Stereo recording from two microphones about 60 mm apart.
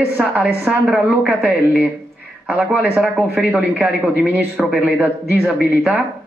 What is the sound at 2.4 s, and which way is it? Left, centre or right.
Speech, right.